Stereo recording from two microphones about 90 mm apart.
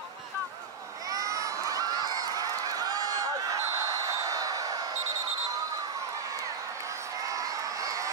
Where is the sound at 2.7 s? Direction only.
45° right (ahead or behind).